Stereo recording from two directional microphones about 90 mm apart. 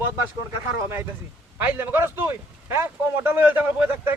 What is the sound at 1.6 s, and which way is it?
A man's voice, 20° right (ahead or behind).